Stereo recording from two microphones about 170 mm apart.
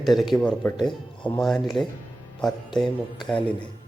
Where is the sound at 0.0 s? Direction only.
Centre (ahead or behind).